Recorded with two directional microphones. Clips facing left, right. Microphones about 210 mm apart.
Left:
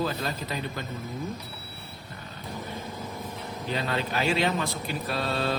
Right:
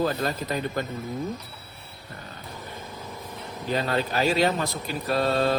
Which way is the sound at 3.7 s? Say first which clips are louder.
Right 4 dB; 40° right (ahead or behind).